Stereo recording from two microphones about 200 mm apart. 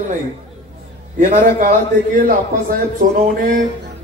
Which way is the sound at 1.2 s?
40° right (ahead or behind).